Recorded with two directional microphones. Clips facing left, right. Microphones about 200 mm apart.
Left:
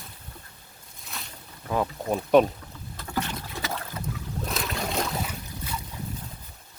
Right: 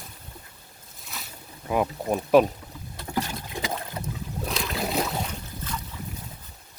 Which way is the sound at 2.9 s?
15° right (ahead or behind).